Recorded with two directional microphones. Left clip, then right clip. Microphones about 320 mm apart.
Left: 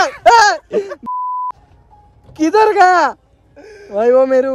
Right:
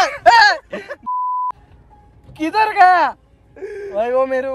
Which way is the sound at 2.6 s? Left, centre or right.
Left.